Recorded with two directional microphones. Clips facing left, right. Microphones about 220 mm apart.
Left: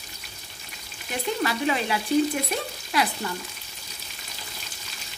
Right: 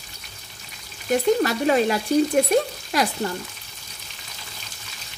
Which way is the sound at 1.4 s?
45° right (ahead or behind).